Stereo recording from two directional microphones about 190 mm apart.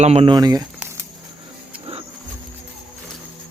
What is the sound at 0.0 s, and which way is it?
Speech, 30° right (ahead or behind).